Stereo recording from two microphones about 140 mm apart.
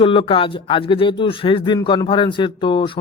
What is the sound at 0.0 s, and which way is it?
Speech, 40° left (ahead or behind).